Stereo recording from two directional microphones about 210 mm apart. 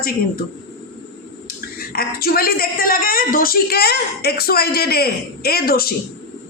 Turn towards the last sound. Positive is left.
turn(degrees=45)  # may be behind; listen again after turning